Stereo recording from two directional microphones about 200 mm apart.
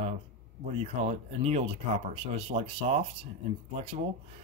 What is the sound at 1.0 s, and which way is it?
Speech, 30° right (ahead or behind).